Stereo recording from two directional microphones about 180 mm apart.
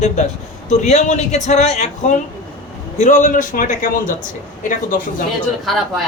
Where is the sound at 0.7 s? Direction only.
40° left (ahead or behind).